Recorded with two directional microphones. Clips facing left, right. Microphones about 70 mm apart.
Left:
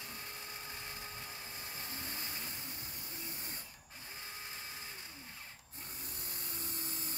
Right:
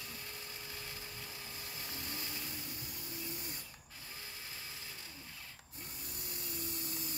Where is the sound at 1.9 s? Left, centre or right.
Left.